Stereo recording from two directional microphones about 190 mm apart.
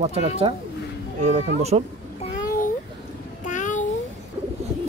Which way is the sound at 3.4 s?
40° left (ahead or behind).